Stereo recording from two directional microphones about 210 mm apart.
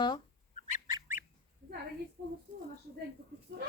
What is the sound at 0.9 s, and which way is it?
Bird, 15° right (ahead or behind).